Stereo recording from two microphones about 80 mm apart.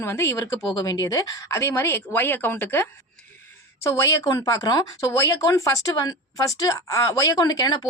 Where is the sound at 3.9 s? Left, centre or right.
Left.